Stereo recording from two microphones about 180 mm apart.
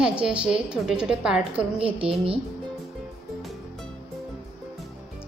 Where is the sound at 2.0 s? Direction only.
30° right (ahead or behind).